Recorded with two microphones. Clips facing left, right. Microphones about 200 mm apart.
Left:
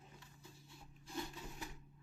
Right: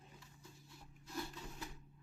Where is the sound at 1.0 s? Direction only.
15° left (ahead or behind).